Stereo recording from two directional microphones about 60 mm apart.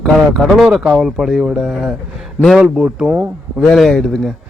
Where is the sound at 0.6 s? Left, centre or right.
Centre.